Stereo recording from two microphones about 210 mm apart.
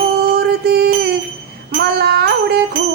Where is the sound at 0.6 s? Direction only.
50° right (ahead or behind).